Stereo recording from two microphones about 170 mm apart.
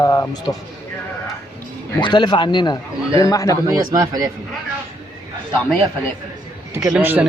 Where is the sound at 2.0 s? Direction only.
25° left (ahead or behind).